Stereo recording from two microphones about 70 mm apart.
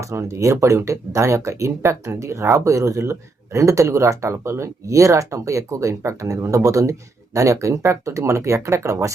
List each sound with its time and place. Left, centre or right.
0.0 s speech: right